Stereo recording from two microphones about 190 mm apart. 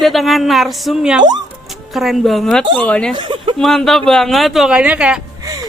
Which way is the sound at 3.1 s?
25° right (ahead or behind).